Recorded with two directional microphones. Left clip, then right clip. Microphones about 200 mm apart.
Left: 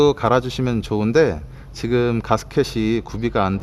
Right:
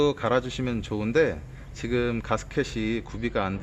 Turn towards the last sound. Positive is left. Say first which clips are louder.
# left 8 dB
turn(degrees=50)  # may be behind; listen again after turning